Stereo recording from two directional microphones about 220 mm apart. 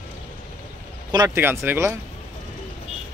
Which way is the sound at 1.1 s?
15° right (ahead or behind).